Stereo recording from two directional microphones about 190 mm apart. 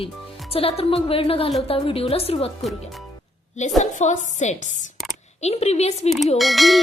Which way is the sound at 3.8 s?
40° left (ahead or behind).